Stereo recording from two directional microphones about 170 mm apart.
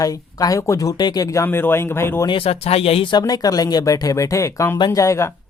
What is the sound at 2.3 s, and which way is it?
Speech, 35° left (ahead or behind).